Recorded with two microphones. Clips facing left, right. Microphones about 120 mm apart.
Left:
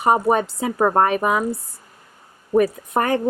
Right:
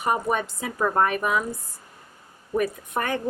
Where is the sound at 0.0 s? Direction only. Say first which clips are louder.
Left 7 dB; 35° left (ahead or behind).